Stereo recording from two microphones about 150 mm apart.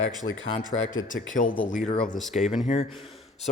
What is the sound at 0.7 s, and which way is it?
Speech, 60° left (ahead or behind).